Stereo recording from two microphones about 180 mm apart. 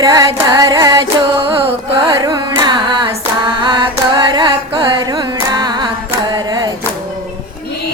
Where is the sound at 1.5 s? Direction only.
30° right (ahead or behind).